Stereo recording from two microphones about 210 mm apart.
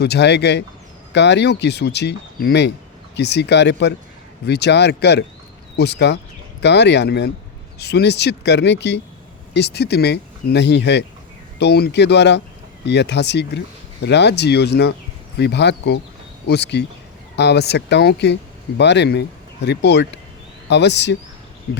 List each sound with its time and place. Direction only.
0.0 s speech: 50° left (ahead or behind)